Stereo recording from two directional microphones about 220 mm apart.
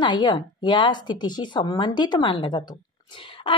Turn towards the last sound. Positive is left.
turn(degrees=25)  # may be behind; listen again after turning